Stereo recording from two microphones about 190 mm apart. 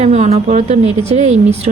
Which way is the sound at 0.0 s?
35° right (ahead or behind).